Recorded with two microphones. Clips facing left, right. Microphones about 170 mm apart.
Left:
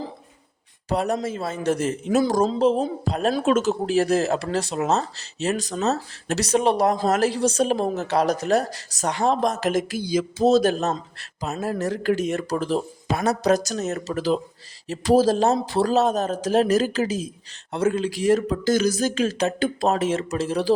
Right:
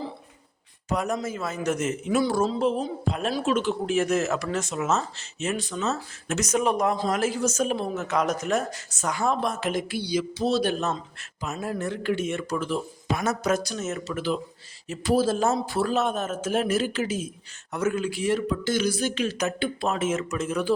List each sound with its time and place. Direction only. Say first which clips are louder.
0.9 s a man's voice: left 4 dB; 35° left (ahead or behind)